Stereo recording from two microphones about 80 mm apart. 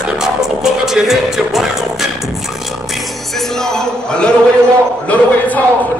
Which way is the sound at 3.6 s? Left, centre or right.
Centre.